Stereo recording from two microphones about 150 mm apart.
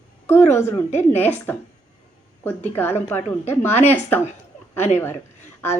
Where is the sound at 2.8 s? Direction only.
15° left (ahead or behind).